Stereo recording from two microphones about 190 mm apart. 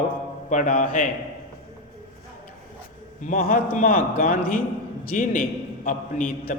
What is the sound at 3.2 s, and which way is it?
A man's voice, 45° left (ahead or behind).